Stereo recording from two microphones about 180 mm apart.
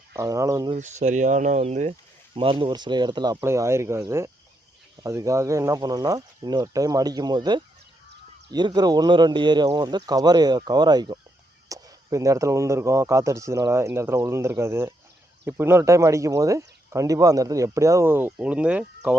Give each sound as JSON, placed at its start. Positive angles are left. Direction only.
{"t": 0.1, "sound": "speech", "side_deg": -15}
{"t": 0.7, "sound": "speech", "side_deg": -40}